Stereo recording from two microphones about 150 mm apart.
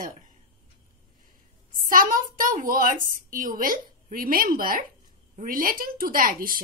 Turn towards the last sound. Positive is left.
turn(degrees=-70)  # may be behind; listen again after turning